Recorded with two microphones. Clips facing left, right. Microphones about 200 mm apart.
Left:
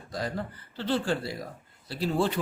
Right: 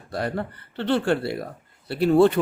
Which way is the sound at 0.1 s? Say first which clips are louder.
Right 5 dB; 65° right (ahead or behind).